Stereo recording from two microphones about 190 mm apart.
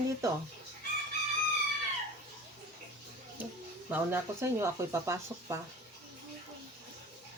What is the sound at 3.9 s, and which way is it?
Speech, 10° right (ahead or behind).